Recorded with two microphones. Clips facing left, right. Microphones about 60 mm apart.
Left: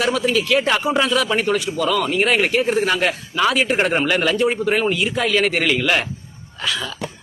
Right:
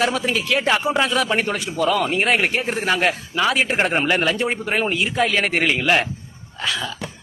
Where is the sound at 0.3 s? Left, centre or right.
Centre.